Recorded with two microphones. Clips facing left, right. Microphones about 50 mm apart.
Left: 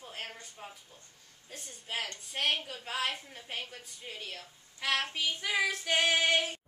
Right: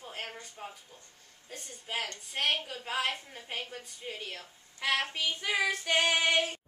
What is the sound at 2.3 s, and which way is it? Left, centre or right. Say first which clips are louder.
A woman's voice: right 1 dB; centre.